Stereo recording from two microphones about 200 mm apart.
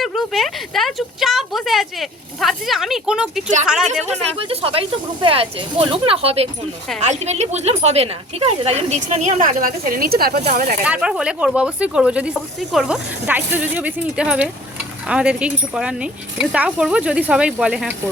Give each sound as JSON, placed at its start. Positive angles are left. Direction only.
{"t": 0.0, "sound": "speech", "side_deg": 0}
{"t": 4.0, "sound": "speech", "side_deg": -30}
{"t": 10.4, "sound": "speech", "side_deg": -40}
{"t": 10.8, "sound": "speech", "side_deg": -5}